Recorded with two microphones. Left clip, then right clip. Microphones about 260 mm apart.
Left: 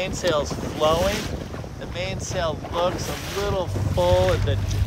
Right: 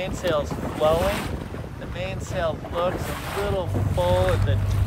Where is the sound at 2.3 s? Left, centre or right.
Left.